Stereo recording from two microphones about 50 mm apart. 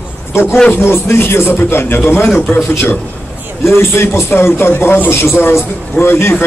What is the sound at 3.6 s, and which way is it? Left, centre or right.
A man's voice, left.